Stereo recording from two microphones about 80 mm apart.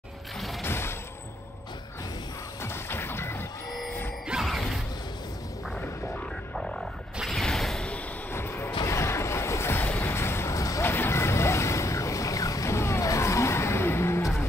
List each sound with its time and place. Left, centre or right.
0.4 s mechanisms: centre
0.7 s mechanisms: left
2.6 s smash: left
4.3 s mechanisms: centre
7.2 s mechanisms: centre
8.3 s music: left
8.8 s a sound: left
10.9 s boat: left